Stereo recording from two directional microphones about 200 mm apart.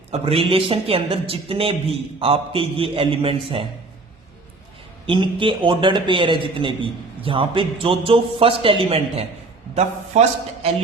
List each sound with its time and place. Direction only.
0.1 s a man's voice: 30° right (ahead or behind)
5.0 s a man's voice: 25° right (ahead or behind)